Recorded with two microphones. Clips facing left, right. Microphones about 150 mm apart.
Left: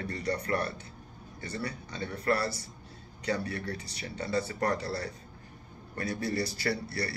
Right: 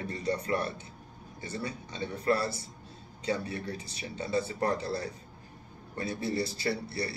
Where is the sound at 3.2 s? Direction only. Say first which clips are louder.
Even; 25° right (ahead or behind).